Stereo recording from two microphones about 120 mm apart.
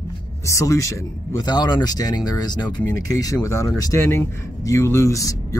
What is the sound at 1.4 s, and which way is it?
Speech, 35° left (ahead or behind).